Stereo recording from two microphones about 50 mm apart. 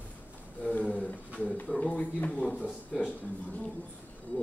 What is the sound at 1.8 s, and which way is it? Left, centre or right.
Speech, left.